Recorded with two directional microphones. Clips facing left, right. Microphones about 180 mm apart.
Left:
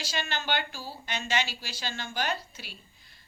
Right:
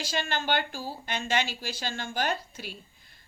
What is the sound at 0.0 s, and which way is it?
A woman's voice, 50° right (ahead or behind).